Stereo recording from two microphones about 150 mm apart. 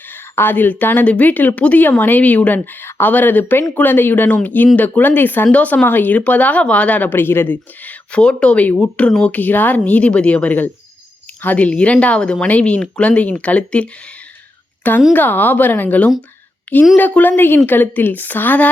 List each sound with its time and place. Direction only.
0.1 s speech: 15° left (ahead or behind)
15.1 s a woman's voice: 10° left (ahead or behind)